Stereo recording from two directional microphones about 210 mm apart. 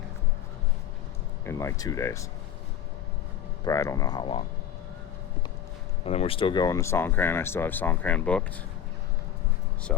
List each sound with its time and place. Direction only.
1.5 s speech: 15° left (ahead or behind)
3.6 s speech: 15° left (ahead or behind)
6.1 s speech: 25° left (ahead or behind); by 8.4 s 5° left (ahead or behind)